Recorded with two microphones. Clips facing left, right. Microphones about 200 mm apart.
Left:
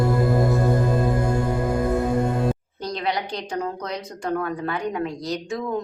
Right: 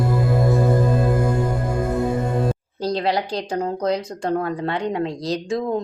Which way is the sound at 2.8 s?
35° right (ahead or behind).